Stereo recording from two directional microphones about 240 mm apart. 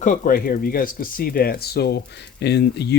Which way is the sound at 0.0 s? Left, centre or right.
Left.